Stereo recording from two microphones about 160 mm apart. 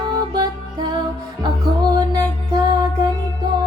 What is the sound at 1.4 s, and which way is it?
Music, 25° right (ahead or behind).